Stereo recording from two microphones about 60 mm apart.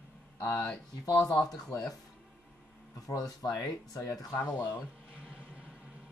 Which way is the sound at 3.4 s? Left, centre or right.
Left.